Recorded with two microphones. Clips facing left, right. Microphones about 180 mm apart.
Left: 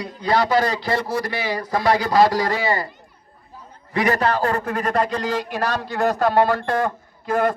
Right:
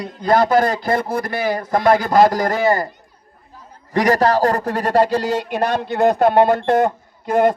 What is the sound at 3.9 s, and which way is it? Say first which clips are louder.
A man's voice: right 5 dB; 40° right (ahead or behind).